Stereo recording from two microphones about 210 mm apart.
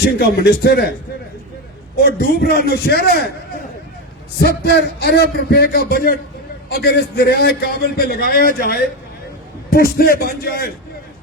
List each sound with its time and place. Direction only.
0.0 s a man's voice: 50° left (ahead or behind)
2.0 s a man's voice: 45° left (ahead or behind)
4.4 s a man's voice: 50° left (ahead or behind)